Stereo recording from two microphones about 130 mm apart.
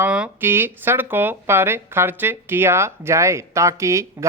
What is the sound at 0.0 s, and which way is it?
A man's voice, 10° right (ahead or behind).